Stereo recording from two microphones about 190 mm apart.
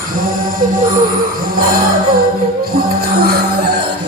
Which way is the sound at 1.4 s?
50° right (ahead or behind).